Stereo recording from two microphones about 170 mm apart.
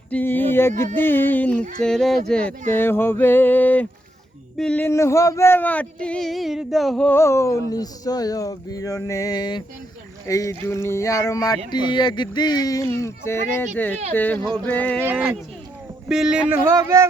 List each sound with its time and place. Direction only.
0.1 s a sound: 10° left (ahead or behind)
0.9 s speech: 10° left (ahead or behind)
15.0 s speech: 10° right (ahead or behind)